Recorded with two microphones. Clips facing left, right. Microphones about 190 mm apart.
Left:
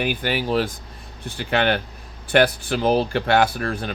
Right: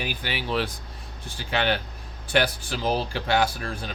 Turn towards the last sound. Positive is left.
turn(degrees=60)  # may be behind; listen again after turning